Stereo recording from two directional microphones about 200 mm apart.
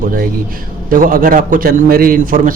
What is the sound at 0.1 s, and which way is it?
A man's voice, 45° right (ahead or behind).